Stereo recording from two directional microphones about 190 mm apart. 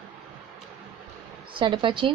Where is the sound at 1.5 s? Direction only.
25° right (ahead or behind).